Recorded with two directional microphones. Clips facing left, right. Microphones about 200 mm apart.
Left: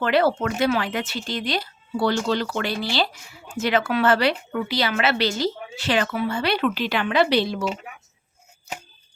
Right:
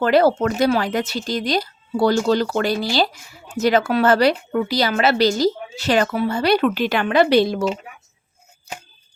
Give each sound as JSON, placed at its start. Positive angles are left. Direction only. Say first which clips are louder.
{"t": 0.0, "sound": "a woman's voice", "louder": "right 5 dB", "side_deg": -40}